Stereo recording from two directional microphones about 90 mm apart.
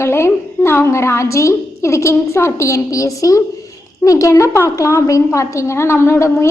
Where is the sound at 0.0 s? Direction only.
30° left (ahead or behind).